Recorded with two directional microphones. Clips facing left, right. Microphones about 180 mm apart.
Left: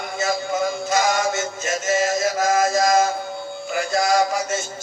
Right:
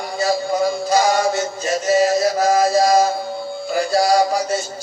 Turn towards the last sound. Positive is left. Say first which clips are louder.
# right 3 dB
turn(degrees=-35)  # may be behind; listen again after turning